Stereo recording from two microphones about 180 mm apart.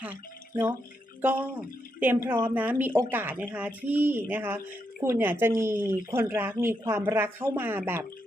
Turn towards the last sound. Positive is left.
turn(degrees=-10)  # may be behind; listen again after turning